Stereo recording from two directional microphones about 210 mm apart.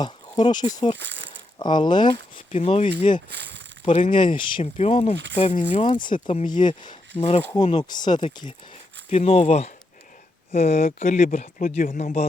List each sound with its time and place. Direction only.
0.0 s speech: 20° left (ahead or behind)
0.9 s speech: 60° right (ahead or behind)
1.5 s speech: 20° left (ahead or behind)
3.2 s speech: 55° right (ahead or behind)
3.8 s speech: 35° left (ahead or behind)
4.1 s speech: 25° left (ahead or behind)
6.1 s speech: 35° left (ahead or behind)